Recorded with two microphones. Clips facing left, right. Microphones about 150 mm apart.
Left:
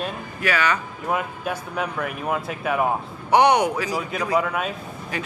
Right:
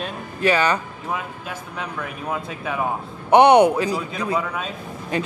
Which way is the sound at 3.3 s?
25° right (ahead or behind).